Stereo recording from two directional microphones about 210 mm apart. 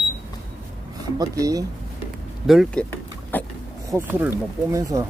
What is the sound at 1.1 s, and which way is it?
Speech, 15° right (ahead or behind).